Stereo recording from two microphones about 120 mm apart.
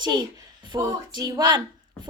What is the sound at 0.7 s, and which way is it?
Child singing, 35° right (ahead or behind).